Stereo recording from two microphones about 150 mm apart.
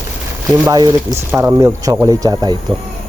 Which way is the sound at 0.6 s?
25° right (ahead or behind).